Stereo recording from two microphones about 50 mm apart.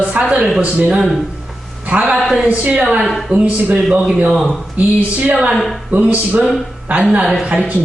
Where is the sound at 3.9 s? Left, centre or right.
Centre.